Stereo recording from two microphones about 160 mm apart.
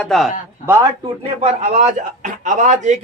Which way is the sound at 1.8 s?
50° right (ahead or behind).